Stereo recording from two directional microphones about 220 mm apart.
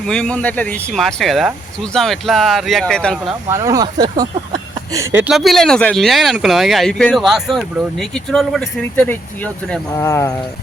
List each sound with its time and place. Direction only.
0.0 s speech: 5° left (ahead or behind)
3.5 s speech: 15° right (ahead or behind)
4.9 s speech: 5° right (ahead or behind); by 10.3 s 15° left (ahead or behind)